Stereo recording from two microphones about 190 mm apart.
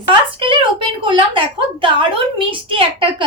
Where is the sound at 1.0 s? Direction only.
25° right (ahead or behind).